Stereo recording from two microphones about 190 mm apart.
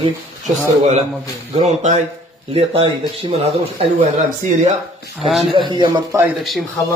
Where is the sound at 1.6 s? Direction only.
35° right (ahead or behind).